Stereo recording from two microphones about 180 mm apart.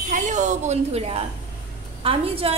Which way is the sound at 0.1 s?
45° right (ahead or behind).